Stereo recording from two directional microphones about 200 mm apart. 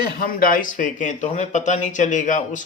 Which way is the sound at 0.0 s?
45° left (ahead or behind).